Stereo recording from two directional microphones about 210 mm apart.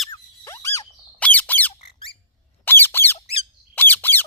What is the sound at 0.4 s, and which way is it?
Squeak, 15° left (ahead or behind).